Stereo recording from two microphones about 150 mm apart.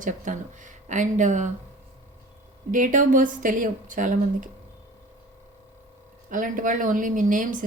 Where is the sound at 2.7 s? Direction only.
60° right (ahead or behind).